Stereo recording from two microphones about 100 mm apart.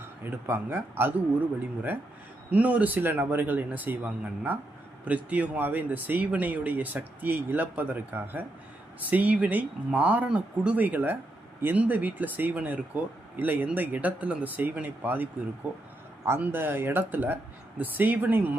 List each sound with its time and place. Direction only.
0.3 s speech: 25° right (ahead or behind)
2.5 s speech: 15° right (ahead or behind)